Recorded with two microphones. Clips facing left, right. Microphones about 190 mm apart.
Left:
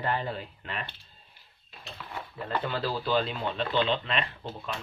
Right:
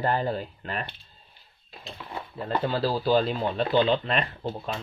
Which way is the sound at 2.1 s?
30° right (ahead or behind).